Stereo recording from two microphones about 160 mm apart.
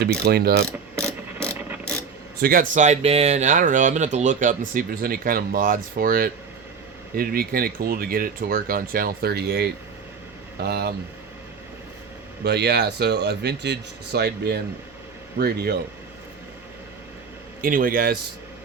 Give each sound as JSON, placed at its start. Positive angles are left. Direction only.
{"t": 0.3, "sound": "mechanisms", "side_deg": -75}
{"t": 0.9, "sound": "mechanisms", "side_deg": -15}
{"t": 2.4, "sound": "speech", "side_deg": -60}
{"t": 12.4, "sound": "speech", "side_deg": -90}
{"t": 15.4, "sound": "speech", "side_deg": -80}
{"t": 17.6, "sound": "speech", "side_deg": -60}